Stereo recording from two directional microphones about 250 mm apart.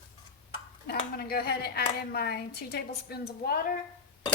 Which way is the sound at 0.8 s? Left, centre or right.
Left.